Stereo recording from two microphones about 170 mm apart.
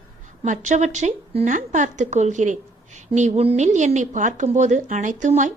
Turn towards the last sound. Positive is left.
turn(degrees=-45)  # may be behind; listen again after turning